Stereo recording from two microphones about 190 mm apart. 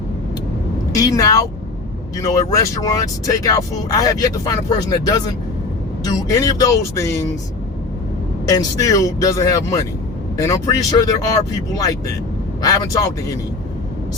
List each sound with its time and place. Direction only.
0.9 s speech: 20° left (ahead or behind)
8.4 s speech: 20° left (ahead or behind)